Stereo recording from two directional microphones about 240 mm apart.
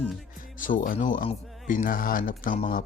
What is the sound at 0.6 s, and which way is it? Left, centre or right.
Speech, left.